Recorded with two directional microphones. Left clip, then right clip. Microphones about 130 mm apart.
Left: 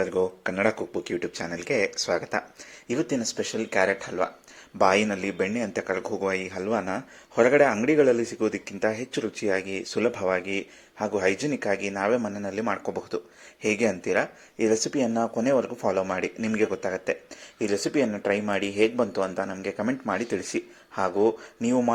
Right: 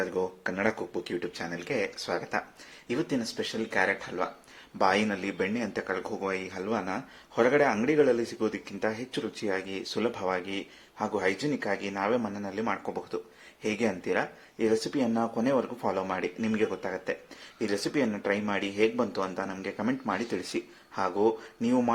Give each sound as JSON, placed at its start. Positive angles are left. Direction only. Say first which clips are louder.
{"t": 0.0, "sound": "speech", "louder": "left 5 dB", "side_deg": 30}